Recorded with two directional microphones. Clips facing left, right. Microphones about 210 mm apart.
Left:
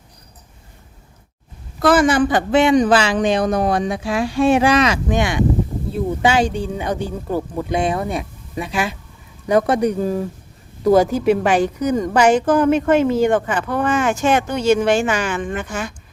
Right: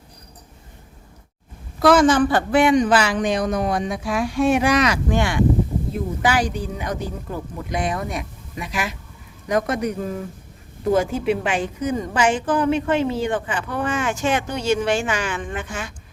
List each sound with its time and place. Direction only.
1.8 s a woman's voice: 5° left (ahead or behind); by 15.9 s 45° left (ahead or behind)